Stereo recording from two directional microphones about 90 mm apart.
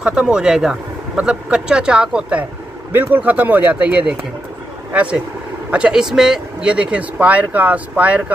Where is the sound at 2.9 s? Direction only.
20° right (ahead or behind).